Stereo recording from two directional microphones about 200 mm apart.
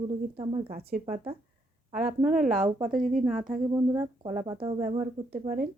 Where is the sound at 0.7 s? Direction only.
45° right (ahead or behind).